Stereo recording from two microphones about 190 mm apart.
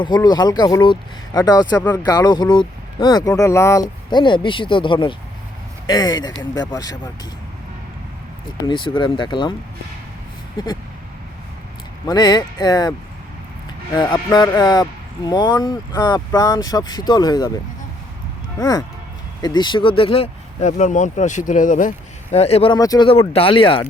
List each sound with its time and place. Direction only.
0.0 s speech: 20° left (ahead or behind)
8.6 s speech: 25° left (ahead or behind)
12.0 s speech: 20° left (ahead or behind)
13.9 s speech: 25° left (ahead or behind)
18.6 s speech: 20° left (ahead or behind)